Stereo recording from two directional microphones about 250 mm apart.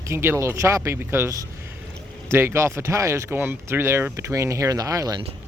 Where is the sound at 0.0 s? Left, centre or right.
Centre.